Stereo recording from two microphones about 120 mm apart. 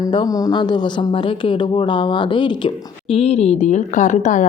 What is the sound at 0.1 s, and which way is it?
Speech, 35° left (ahead or behind).